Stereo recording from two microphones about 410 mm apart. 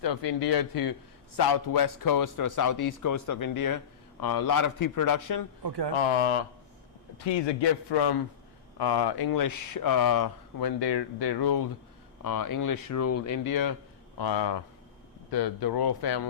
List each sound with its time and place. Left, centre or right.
0.0 s a man's voice: left
5.6 s speech: right
7.4 s a man's voice: left
8.8 s speech: left
12.2 s a man's voice: left
14.2 s speech: left